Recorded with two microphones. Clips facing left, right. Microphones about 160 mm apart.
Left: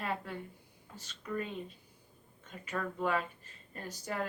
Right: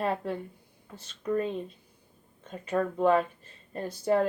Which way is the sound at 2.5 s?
40° right (ahead or behind).